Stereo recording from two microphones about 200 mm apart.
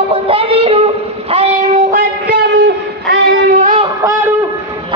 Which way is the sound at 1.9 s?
50° right (ahead or behind).